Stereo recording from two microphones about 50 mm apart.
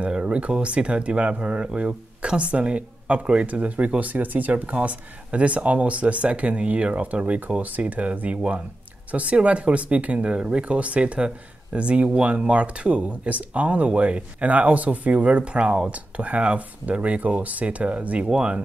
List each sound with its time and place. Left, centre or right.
0.0 s speech: right